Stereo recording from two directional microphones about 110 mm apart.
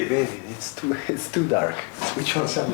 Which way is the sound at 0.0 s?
25° left (ahead or behind).